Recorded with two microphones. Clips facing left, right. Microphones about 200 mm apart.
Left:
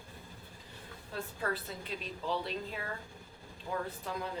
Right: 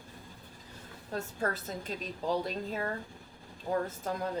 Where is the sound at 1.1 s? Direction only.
45° right (ahead or behind).